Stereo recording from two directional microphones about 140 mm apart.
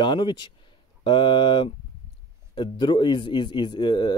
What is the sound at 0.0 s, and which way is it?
A man's voice, 35° left (ahead or behind).